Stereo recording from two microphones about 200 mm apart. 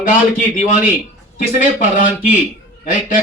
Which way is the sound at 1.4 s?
40° left (ahead or behind).